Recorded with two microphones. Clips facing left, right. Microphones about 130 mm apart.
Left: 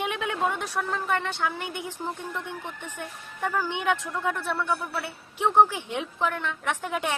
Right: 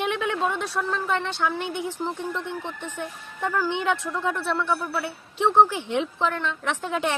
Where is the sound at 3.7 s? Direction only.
15° left (ahead or behind).